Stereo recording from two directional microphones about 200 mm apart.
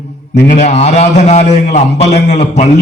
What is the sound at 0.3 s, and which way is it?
A man's voice, 35° left (ahead or behind).